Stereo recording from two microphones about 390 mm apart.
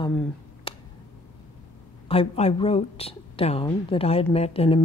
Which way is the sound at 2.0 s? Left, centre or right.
Centre.